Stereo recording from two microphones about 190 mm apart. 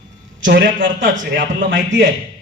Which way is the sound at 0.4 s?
70° right (ahead or behind).